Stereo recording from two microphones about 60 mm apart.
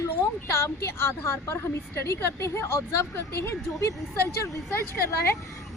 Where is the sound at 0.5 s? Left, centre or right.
Left.